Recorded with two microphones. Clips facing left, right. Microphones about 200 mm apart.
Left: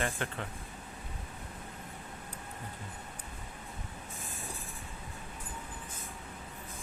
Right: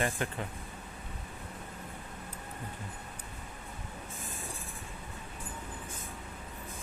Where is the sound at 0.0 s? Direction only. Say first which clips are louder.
Right 2 dB; 15° right (ahead or behind).